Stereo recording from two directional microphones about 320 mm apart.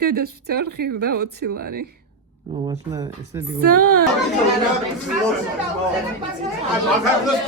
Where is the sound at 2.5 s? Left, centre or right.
Centre.